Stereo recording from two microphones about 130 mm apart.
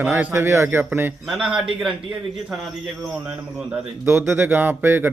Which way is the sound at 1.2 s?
5° right (ahead or behind).